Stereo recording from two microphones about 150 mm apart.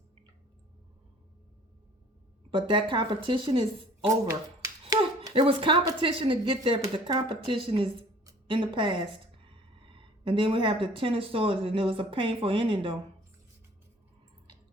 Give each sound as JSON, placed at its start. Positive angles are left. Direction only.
{"t": 2.5, "sound": "speech", "side_deg": -30}
{"t": 4.0, "sound": "finger snapping", "side_deg": -20}
{"t": 6.0, "sound": "speech", "side_deg": -35}